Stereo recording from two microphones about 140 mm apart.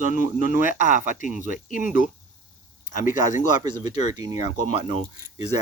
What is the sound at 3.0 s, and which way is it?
Speech, 70° left (ahead or behind).